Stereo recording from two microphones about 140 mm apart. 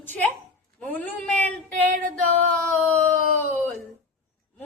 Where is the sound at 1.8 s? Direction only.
60° right (ahead or behind).